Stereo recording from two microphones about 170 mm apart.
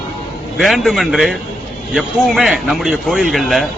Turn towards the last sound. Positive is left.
turn(degrees=0)  # may be behind; listen again after turning